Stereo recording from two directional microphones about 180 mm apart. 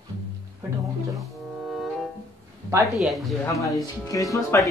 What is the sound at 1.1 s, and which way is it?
Music, centre (ahead or behind).